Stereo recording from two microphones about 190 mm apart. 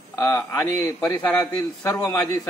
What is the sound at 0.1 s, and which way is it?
A man's voice, 15° left (ahead or behind).